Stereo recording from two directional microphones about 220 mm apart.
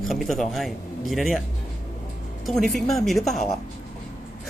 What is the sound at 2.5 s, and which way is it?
Speech, centre (ahead or behind).